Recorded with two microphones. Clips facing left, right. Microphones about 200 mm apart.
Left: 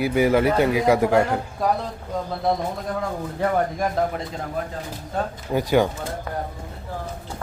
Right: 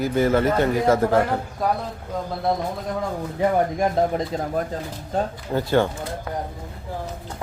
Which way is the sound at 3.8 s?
30° right (ahead or behind).